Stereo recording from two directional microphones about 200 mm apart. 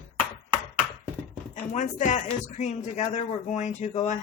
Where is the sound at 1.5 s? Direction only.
40° left (ahead or behind).